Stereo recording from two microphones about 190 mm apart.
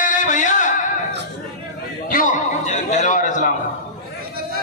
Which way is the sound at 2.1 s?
45° left (ahead or behind).